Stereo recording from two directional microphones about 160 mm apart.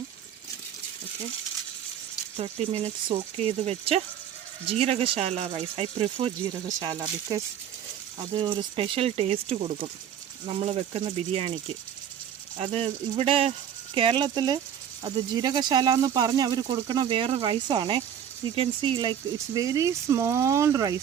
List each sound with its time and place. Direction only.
2.3 s speech: 40° right (ahead or behind)
12.5 s speech: 40° right (ahead or behind); by 21.0 s 20° right (ahead or behind)